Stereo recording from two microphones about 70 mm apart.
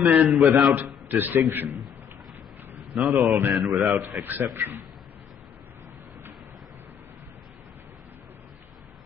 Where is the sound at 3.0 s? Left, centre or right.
Right.